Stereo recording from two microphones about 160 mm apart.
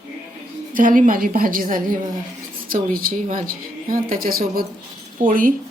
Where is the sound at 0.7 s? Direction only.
55° right (ahead or behind).